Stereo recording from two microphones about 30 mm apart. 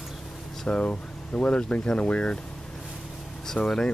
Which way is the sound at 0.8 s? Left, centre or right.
Left.